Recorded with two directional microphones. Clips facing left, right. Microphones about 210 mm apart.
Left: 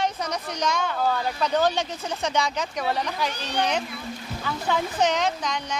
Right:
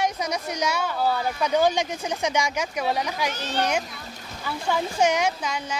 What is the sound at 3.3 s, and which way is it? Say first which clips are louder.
Speech: even; 15° left (ahead or behind).